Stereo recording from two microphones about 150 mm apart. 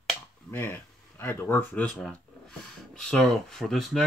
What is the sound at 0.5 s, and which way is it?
Speech, 10° left (ahead or behind).